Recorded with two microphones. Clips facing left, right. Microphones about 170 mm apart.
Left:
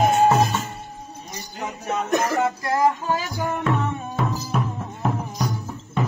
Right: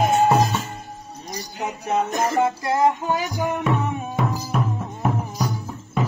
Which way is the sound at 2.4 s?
20° right (ahead or behind).